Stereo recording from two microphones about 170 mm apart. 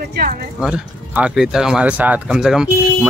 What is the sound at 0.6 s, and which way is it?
Speech, 5° right (ahead or behind).